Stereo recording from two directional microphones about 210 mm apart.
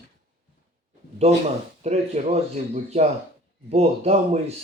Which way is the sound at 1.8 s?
30° right (ahead or behind).